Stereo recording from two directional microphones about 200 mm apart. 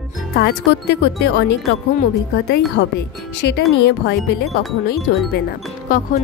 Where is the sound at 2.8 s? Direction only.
60° left (ahead or behind).